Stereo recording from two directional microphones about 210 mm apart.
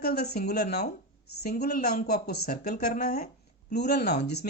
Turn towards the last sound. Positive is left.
turn(degrees=50)  # may be behind; listen again after turning